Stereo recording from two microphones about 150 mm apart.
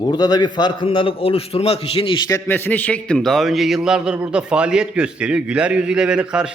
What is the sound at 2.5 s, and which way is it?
A man's voice, 10° left (ahead or behind).